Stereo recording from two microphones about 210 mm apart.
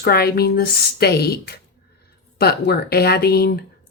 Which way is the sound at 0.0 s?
50° left (ahead or behind).